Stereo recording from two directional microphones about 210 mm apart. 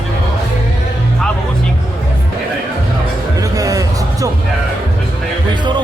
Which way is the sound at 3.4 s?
15° right (ahead or behind).